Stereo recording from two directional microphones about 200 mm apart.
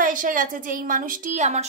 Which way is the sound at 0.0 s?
40° right (ahead or behind).